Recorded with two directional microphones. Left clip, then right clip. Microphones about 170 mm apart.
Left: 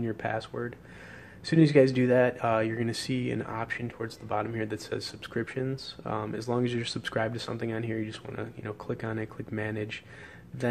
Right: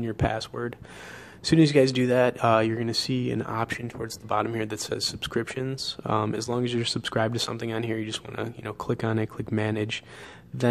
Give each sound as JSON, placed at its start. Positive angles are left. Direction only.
{"t": 0.0, "sound": "speech", "side_deg": -35}
{"t": 3.6, "sound": "speech", "side_deg": -40}